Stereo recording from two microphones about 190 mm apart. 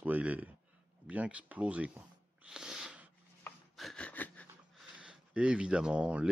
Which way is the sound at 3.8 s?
5° left (ahead or behind).